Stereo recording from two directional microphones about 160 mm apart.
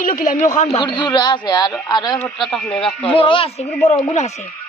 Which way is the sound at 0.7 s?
30° left (ahead or behind).